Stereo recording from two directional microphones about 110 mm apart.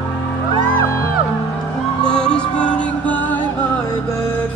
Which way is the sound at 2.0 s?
5° left (ahead or behind).